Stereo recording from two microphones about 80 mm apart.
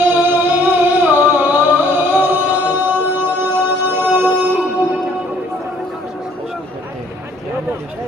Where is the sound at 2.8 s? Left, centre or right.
Right.